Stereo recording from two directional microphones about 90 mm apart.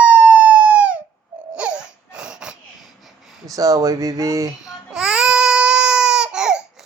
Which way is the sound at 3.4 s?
40° right (ahead or behind).